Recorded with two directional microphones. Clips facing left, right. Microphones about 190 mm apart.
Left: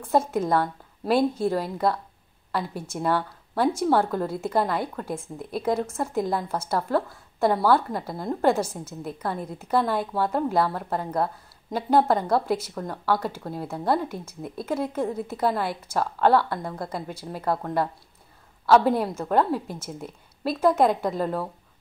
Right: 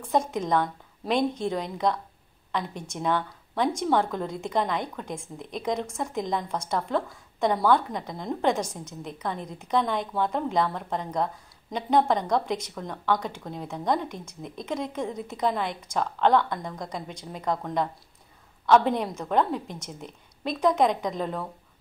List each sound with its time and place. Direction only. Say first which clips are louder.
0.1 s a woman's voice: left 2 dB; 5° left (ahead or behind)